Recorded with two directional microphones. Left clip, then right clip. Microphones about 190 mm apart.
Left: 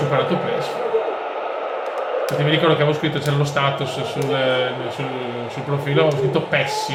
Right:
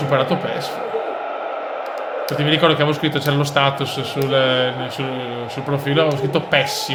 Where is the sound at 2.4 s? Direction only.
50° right (ahead or behind).